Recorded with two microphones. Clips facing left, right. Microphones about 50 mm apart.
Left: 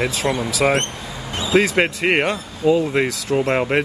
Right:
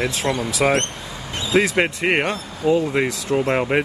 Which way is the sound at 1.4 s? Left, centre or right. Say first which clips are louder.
Left 1 dB; centre.